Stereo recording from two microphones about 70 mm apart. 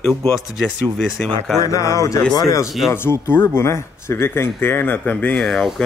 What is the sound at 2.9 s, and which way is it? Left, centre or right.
Speech, left.